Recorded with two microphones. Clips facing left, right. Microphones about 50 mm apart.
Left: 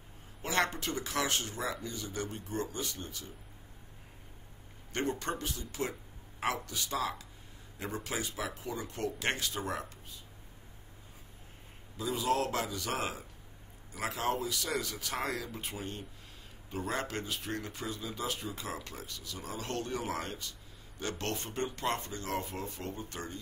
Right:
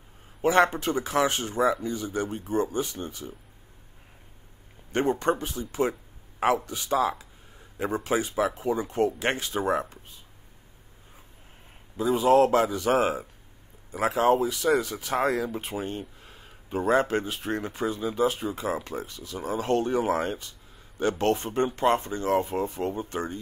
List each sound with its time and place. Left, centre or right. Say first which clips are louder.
0.4 s speech: right 11 dB; right
5.2 s speech: right 10 dB; right
12.0 s speech: right 12 dB; right